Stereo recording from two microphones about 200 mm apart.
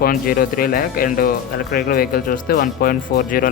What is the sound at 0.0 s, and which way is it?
Speech, 45° left (ahead or behind).